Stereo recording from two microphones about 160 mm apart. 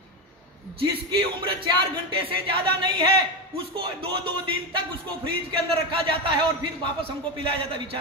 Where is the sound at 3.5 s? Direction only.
35° right (ahead or behind).